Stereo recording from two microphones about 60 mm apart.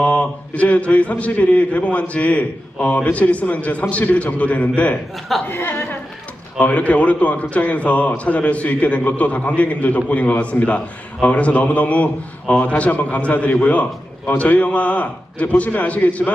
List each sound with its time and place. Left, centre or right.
0.0 s a man's voice: left
5.5 s a woman's voice: left
6.6 s a man's voice: left